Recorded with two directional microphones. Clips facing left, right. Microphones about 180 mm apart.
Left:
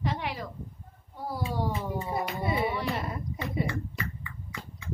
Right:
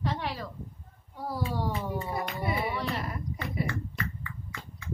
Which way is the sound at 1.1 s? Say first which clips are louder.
Even; 15° left (ahead or behind).